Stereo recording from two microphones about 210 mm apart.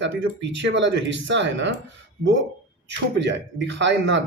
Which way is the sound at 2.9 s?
55° right (ahead or behind).